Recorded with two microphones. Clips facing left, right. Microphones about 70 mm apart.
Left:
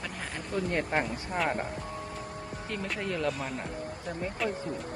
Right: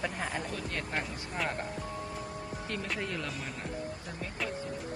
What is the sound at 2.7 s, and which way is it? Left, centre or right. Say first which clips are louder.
Speech: left 3 dB; centre.